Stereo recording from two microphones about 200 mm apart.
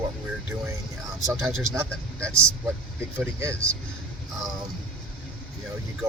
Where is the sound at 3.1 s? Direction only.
15° right (ahead or behind).